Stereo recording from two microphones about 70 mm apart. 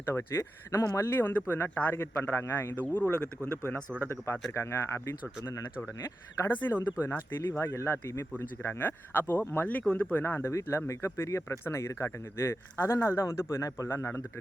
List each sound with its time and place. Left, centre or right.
0.0 s speech: left
2.8 s speech: left
4.5 s speech: left
6.7 s speech: left
8.4 s speech: left
10.4 s speech: left
13.9 s speech: left